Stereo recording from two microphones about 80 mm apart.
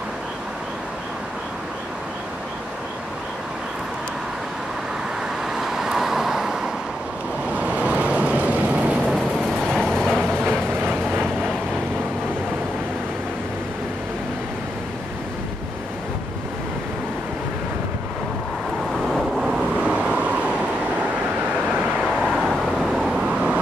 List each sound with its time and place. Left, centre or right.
5.5 s vehicle: centre
9.0 s train: centre
19.0 s vehicle: centre
22.2 s vehicle: centre
22.8 s vehicle: centre